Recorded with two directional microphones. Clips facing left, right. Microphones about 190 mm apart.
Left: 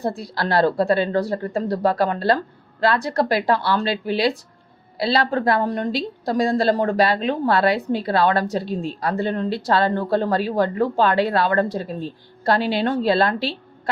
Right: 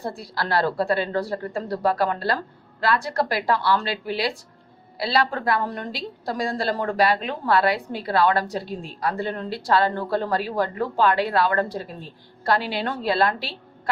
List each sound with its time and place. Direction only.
0.0 s a woman's voice: 25° left (ahead or behind)